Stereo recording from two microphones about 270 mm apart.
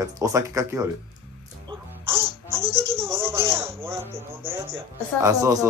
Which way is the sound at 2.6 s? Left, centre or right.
Right.